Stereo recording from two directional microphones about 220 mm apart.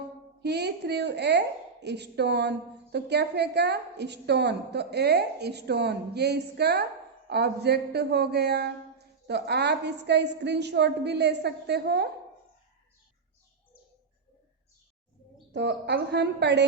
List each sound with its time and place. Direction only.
0.4 s a woman's voice: 50° right (ahead or behind)
15.5 s a woman's voice: 50° right (ahead or behind)